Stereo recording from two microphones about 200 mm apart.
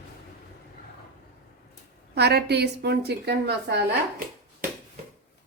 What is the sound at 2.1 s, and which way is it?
A woman's voice, 55° right (ahead or behind).